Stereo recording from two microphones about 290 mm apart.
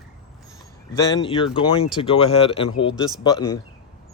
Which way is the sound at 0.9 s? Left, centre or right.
Centre.